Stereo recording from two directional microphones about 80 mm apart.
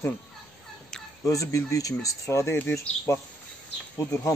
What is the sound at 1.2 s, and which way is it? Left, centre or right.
Speech, left.